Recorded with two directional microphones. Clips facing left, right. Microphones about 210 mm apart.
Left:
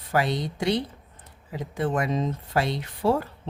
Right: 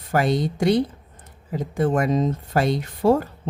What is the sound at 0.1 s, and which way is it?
A woman's voice, 45° right (ahead or behind).